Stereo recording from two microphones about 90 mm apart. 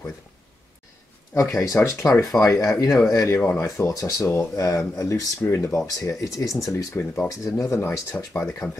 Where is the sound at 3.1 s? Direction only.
30° left (ahead or behind).